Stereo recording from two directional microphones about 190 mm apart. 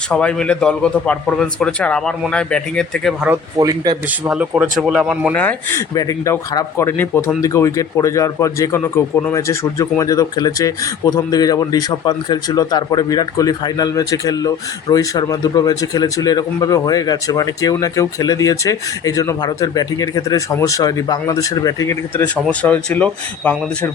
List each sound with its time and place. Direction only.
0.1 s a man's voice: 5° left (ahead or behind)
3.6 s speech: 20° right (ahead or behind)
4.3 s a man's voice: 5° right (ahead or behind)
5.3 s speech: 10° left (ahead or behind)